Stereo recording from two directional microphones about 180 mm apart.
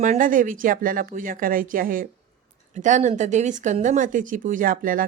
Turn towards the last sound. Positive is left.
turn(degrees=-50)  # may be behind; listen again after turning